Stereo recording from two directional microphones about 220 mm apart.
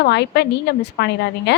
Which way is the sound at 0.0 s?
50° left (ahead or behind).